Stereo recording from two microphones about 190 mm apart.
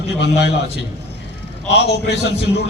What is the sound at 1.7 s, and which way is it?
Speech, 65° left (ahead or behind).